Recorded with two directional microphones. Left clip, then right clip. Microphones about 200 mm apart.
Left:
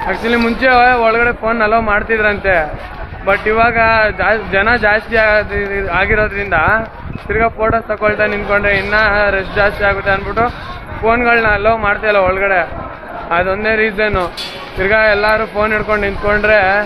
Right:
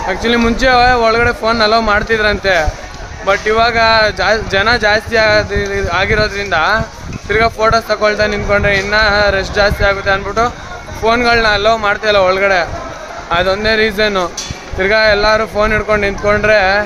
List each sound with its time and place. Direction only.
0.1 s speech: 20° right (ahead or behind)